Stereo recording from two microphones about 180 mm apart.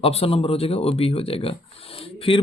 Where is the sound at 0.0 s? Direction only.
35° left (ahead or behind).